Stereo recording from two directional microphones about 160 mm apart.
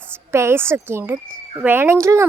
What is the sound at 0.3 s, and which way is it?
Speech, 15° right (ahead or behind).